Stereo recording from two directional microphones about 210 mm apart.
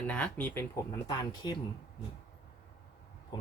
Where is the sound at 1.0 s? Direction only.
20° left (ahead or behind).